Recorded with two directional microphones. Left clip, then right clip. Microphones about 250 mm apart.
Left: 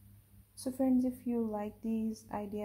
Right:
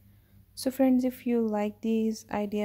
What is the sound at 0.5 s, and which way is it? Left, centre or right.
Speech, right.